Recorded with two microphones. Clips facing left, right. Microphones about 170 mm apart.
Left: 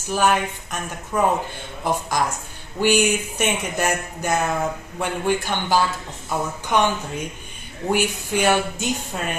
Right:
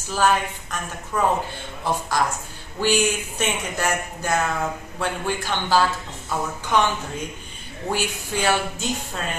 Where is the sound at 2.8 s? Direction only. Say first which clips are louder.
Left 3 dB; 15° left (ahead or behind).